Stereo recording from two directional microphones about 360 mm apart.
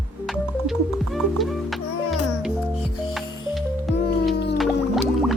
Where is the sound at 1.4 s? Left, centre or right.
Centre.